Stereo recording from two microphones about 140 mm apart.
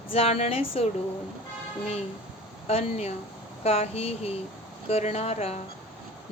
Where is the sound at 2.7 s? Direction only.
45° left (ahead or behind).